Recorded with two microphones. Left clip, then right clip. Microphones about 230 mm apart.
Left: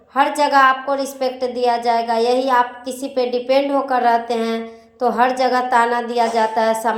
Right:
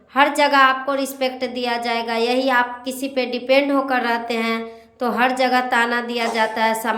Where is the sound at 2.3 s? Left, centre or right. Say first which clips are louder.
Even; centre.